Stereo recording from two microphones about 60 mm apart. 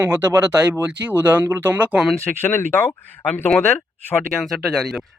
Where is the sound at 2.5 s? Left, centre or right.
Left.